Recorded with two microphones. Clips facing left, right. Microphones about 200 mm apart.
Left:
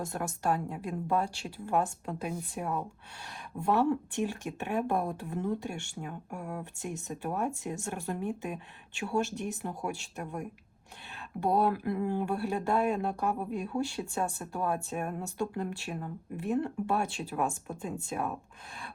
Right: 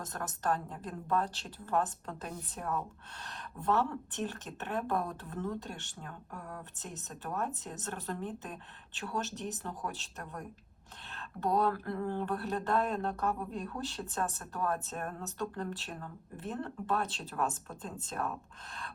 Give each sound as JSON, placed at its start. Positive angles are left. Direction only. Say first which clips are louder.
{"t": 0.0, "sound": "a woman's voice", "louder": "left 4 dB", "side_deg": 10}